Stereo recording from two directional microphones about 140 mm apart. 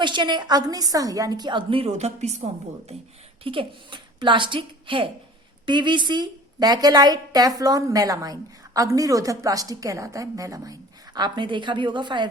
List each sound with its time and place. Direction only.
0.0 s a woman's voice: 35° right (ahead or behind); by 2.5 s 50° right (ahead or behind)
3.4 s a woman's voice: 40° right (ahead or behind)